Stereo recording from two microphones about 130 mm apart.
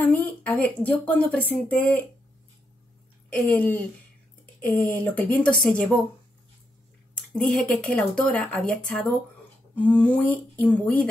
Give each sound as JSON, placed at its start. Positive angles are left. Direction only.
{"t": 0.0, "sound": "a woman's voice", "side_deg": 10}
{"t": 3.3, "sound": "a woman's voice", "side_deg": 10}
{"t": 7.3, "sound": "a woman's voice", "side_deg": 5}